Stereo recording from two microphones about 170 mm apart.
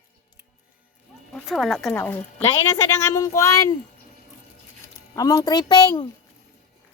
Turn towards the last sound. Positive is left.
turn(degrees=25)  # may be behind; listen again after turning